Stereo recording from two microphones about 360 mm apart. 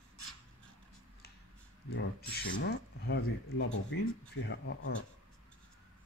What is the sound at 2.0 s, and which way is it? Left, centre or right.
Speech, left.